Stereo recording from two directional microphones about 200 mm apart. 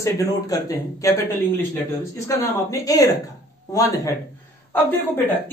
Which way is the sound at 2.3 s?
15° left (ahead or behind).